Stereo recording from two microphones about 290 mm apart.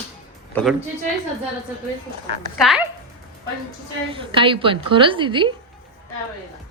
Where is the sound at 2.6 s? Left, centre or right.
Centre.